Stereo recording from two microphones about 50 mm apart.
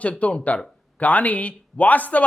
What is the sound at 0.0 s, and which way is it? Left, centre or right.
A man's voice, left.